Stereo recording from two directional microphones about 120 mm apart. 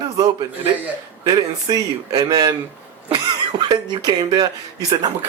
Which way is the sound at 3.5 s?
35° right (ahead or behind).